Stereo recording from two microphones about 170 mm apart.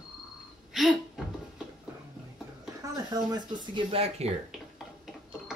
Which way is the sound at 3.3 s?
25° right (ahead or behind).